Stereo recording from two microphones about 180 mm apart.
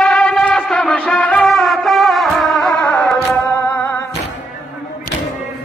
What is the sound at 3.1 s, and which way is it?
Music, 5° left (ahead or behind).